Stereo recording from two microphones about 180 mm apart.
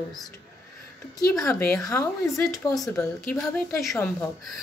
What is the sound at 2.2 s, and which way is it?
A woman's voice, centre (ahead or behind).